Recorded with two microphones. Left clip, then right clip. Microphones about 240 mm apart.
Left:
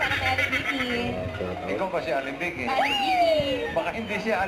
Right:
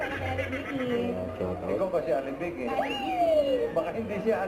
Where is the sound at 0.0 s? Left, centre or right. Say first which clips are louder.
Left 7 dB; centre.